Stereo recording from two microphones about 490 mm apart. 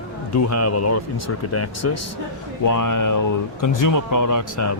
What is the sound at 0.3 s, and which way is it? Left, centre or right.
Speech, left.